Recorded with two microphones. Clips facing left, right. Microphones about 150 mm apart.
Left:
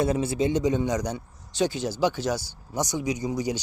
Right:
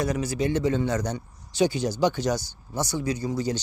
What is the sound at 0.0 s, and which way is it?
Speech, 25° left (ahead or behind).